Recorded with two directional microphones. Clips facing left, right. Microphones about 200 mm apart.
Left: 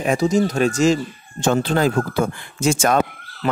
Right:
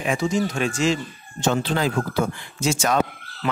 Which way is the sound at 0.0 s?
40° left (ahead or behind).